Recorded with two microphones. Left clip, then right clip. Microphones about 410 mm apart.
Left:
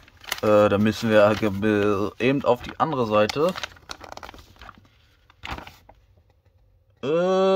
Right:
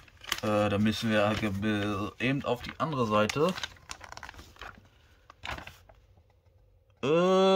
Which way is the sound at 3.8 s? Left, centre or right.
Centre.